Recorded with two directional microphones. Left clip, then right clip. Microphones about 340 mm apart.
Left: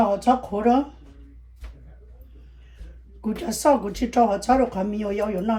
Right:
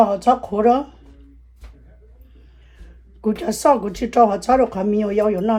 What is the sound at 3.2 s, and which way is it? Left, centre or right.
Speech, right.